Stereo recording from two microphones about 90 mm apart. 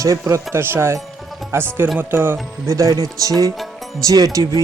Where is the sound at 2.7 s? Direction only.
35° right (ahead or behind).